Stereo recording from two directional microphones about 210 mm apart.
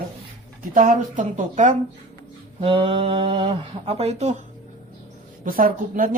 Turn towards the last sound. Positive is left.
turn(degrees=-40)  # may be behind; listen again after turning